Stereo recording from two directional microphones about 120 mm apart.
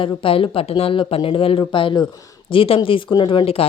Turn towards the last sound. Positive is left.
turn(degrees=50)  # may be behind; listen again after turning